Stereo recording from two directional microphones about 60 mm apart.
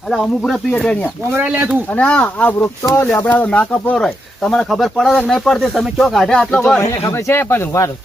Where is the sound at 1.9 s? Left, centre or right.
Left.